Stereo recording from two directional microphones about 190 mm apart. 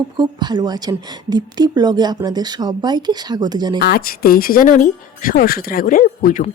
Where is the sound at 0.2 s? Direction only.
25° right (ahead or behind).